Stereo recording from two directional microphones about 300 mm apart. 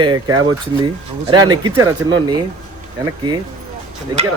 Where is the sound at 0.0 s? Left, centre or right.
Centre.